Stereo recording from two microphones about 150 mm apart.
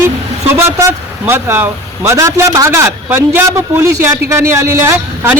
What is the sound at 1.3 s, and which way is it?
A man's voice, 15° right (ahead or behind).